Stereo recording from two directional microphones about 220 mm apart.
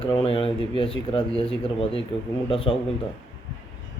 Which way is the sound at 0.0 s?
25° left (ahead or behind).